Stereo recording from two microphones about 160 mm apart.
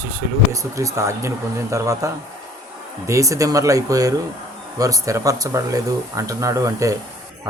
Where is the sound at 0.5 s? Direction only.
20° right (ahead or behind).